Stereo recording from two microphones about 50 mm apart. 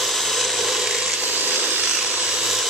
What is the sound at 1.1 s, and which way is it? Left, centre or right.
Tools, right.